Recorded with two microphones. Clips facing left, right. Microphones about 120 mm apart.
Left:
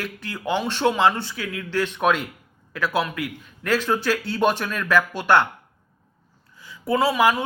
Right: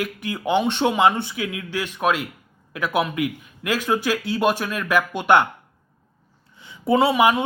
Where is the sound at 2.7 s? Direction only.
15° right (ahead or behind).